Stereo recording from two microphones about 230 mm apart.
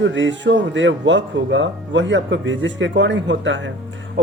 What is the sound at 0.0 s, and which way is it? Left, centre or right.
Speech, right.